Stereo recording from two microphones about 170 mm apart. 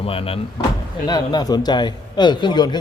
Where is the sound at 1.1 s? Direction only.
25° left (ahead or behind).